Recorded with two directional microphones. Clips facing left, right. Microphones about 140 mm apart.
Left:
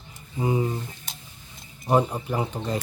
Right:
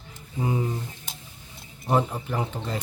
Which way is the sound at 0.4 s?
15° left (ahead or behind).